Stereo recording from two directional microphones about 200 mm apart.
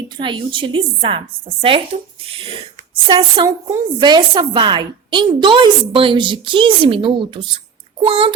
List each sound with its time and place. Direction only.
0.2 s a woman's voice: 25° right (ahead or behind)